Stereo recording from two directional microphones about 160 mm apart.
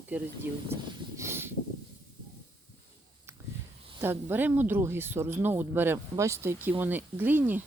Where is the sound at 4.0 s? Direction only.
15° right (ahead or behind).